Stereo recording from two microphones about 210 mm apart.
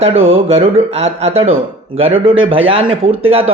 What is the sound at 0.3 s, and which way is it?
A man's voice, 30° right (ahead or behind).